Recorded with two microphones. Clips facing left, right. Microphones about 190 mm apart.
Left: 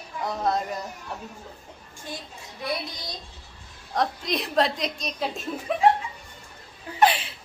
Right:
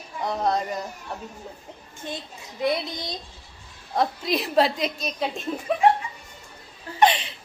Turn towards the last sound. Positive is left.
turn(degrees=5)  # may be behind; listen again after turning